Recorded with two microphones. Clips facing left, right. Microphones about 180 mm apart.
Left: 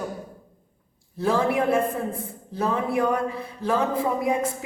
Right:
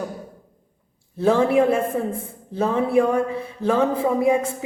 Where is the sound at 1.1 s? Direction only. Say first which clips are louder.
Right 5 dB; 25° right (ahead or behind).